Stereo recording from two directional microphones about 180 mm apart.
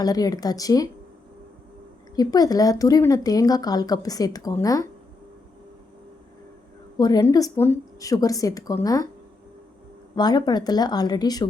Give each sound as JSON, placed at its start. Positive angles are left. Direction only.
{"t": 0.0, "sound": "speech", "side_deg": 20}
{"t": 2.1, "sound": "speech", "side_deg": 20}
{"t": 7.0, "sound": "speech", "side_deg": 20}
{"t": 10.2, "sound": "speech", "side_deg": 20}